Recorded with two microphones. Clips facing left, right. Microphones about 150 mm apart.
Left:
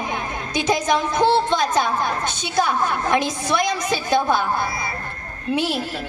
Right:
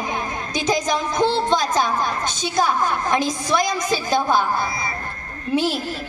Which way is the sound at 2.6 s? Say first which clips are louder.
Even; 60° left (ahead or behind).